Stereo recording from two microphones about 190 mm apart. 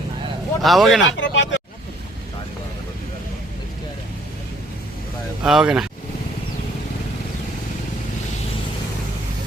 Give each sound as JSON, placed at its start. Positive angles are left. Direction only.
{"t": 0.6, "sound": "speech", "side_deg": 0}
{"t": 1.0, "sound": "speech", "side_deg": 75}
{"t": 5.4, "sound": "speech", "side_deg": -5}